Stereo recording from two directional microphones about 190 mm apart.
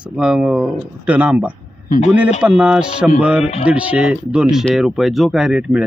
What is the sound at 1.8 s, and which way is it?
Speech, 45° left (ahead or behind).